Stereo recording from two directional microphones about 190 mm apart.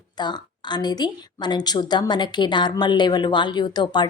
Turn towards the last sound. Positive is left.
turn(degrees=25)  # may be behind; listen again after turning